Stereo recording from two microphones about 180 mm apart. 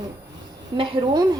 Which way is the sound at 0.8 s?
25° right (ahead or behind).